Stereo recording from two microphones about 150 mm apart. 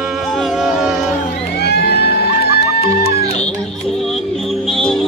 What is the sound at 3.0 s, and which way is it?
Music, 45° left (ahead or behind).